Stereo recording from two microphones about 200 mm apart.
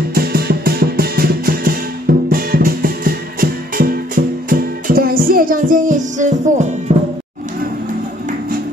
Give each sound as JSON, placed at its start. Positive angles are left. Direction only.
{"t": 0.1, "sound": "music", "side_deg": -50}